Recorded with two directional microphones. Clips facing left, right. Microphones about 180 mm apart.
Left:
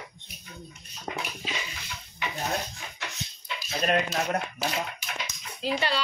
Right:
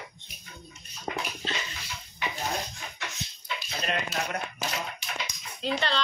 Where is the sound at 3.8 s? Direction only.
45° left (ahead or behind).